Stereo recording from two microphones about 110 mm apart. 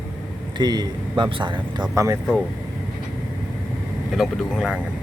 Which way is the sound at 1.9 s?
25° right (ahead or behind).